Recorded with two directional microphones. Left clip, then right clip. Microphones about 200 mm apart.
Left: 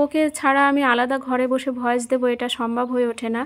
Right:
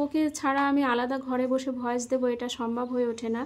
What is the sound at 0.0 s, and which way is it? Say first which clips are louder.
A woman's voice: left 8 dB; 25° left (ahead or behind).